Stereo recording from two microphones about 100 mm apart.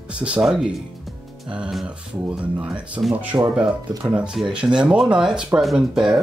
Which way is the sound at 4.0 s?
10° right (ahead or behind).